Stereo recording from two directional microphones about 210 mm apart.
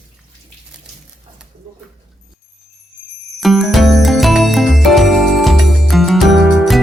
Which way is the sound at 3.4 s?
Centre (ahead or behind).